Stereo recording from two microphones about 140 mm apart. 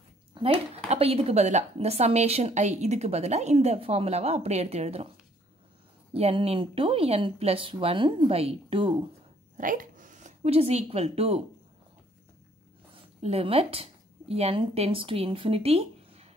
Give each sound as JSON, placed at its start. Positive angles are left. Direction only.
{"t": 0.3, "sound": "a sound", "side_deg": -40}
{"t": 0.8, "sound": "a woman's voice", "side_deg": -45}
{"t": 6.1, "sound": "speech", "side_deg": -45}
{"t": 9.6, "sound": "speech", "side_deg": -75}
{"t": 12.9, "sound": "speech", "side_deg": -45}